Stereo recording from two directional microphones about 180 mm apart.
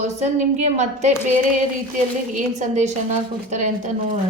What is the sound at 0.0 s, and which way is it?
A woman's voice, 40° right (ahead or behind).